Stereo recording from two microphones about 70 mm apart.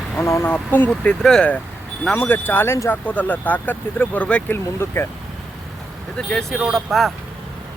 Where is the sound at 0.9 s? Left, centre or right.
Centre.